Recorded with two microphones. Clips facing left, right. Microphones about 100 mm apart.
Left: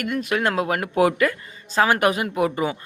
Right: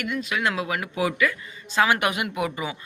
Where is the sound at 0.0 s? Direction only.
50° left (ahead or behind).